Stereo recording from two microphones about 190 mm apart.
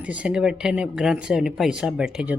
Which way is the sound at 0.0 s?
5° right (ahead or behind).